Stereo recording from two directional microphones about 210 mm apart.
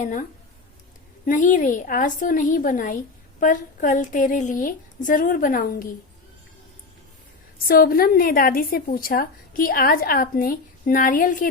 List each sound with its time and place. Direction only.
0.0 s a woman's voice: 40° left (ahead or behind)
7.7 s a woman's voice: 45° left (ahead or behind)